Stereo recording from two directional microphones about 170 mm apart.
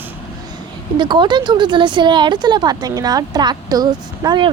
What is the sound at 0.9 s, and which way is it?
A woman's voice, 25° right (ahead or behind).